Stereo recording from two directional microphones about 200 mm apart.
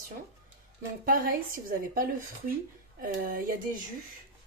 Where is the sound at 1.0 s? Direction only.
45° right (ahead or behind).